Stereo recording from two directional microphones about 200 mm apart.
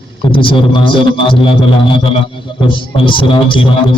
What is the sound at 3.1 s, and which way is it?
Speech, 25° left (ahead or behind).